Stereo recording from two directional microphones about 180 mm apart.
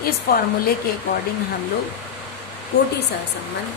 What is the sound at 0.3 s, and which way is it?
Speech, 50° left (ahead or behind).